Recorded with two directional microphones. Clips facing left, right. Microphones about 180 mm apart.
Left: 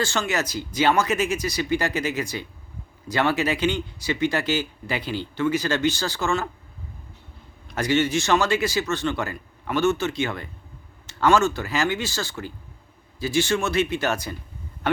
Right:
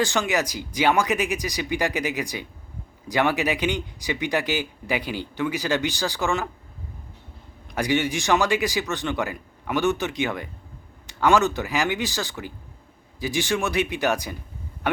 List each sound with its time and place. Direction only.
0.0 s speech: 15° right (ahead or behind)
7.7 s speech: 15° right (ahead or behind)